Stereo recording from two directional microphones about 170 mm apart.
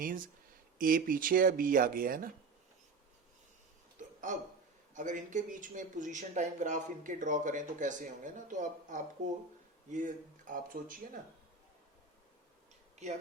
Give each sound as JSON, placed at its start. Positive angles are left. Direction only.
{"t": 0.0, "sound": "speech", "side_deg": -55}
{"t": 4.0, "sound": "a sound", "side_deg": -45}
{"t": 4.9, "sound": "speech", "side_deg": -45}
{"t": 13.0, "sound": "speech", "side_deg": -40}